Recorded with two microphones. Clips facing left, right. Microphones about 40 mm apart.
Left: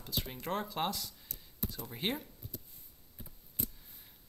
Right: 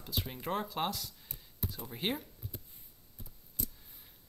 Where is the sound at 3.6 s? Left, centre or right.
Left.